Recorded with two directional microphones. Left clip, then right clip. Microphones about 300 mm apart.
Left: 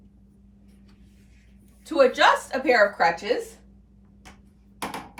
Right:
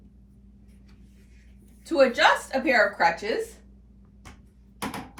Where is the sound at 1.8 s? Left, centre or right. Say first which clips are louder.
Left 1 dB; centre.